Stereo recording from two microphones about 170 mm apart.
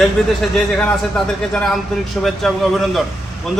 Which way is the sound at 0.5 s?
5° left (ahead or behind).